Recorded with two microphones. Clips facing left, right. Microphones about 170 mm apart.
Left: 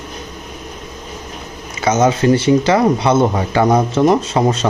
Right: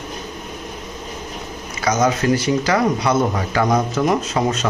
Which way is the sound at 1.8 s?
25° left (ahead or behind).